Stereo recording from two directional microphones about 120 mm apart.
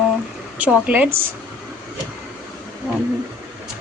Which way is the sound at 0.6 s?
10° right (ahead or behind).